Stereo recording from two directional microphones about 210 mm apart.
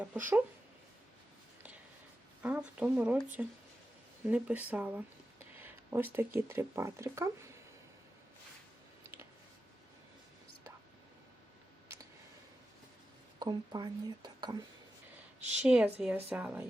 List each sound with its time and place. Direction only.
0.0 s speech: 10° right (ahead or behind)
2.4 s speech: 5° right (ahead or behind)
13.4 s speech: 20° right (ahead or behind)
15.4 s a woman's voice: 5° right (ahead or behind)